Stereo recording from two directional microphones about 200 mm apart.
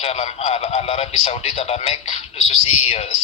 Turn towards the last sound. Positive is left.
turn(degrees=30)  # may be behind; listen again after turning